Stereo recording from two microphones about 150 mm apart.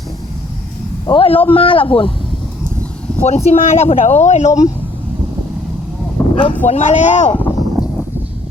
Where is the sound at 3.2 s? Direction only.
50° left (ahead or behind).